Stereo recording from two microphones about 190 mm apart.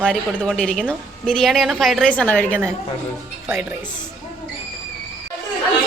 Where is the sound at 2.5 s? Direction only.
10° right (ahead or behind).